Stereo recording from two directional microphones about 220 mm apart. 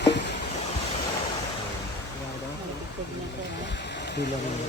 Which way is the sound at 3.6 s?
50° left (ahead or behind).